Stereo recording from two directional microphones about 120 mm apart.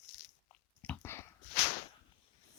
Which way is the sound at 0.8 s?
15° left (ahead or behind).